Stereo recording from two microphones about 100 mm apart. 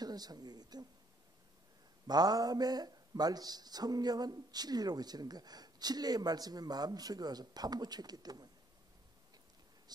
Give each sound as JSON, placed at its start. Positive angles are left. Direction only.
{"t": 0.0, "sound": "a woman's voice", "side_deg": -40}
{"t": 2.0, "sound": "speech", "side_deg": -40}